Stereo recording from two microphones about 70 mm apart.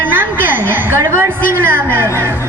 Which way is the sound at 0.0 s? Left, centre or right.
Right.